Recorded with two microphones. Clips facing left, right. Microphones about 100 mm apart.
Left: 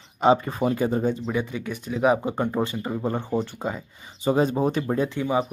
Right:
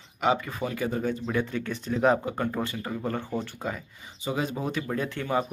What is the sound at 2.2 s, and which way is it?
Speech, 20° left (ahead or behind).